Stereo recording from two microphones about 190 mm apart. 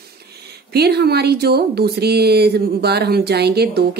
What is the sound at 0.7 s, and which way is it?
Speech, 60° right (ahead or behind).